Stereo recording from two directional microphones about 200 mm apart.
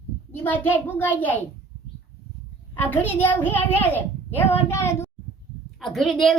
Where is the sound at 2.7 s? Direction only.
10° left (ahead or behind).